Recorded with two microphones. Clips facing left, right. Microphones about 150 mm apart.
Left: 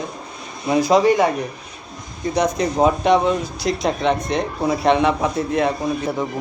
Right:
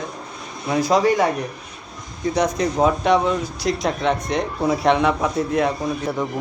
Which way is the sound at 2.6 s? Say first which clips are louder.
Left 1 dB; 5° left (ahead or behind).